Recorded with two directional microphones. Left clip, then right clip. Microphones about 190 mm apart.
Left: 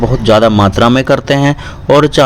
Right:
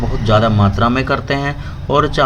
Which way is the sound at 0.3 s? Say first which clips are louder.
Left 6 dB; 50° left (ahead or behind).